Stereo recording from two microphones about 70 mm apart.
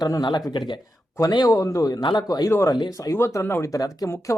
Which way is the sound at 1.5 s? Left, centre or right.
Left.